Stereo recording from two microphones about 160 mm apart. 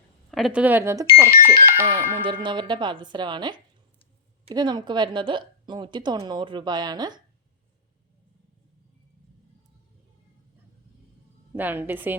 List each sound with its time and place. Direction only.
0.3 s a woman's voice: centre (ahead or behind); by 1.9 s 15° right (ahead or behind)
2.2 s a woman's voice: 30° right (ahead or behind)
11.5 s speech: 10° right (ahead or behind)